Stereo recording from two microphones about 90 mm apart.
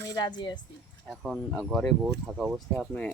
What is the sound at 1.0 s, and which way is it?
Speech, centre (ahead or behind).